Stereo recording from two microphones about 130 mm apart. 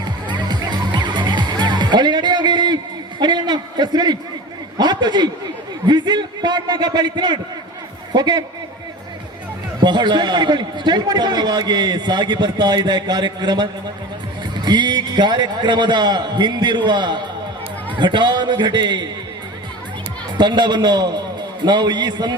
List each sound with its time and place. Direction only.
0.3 s music: 35° right (ahead or behind)
3.2 s a man's voice: 35° right (ahead or behind)
9.8 s a man's voice: 35° right (ahead or behind)
20.4 s a man's voice: 35° right (ahead or behind)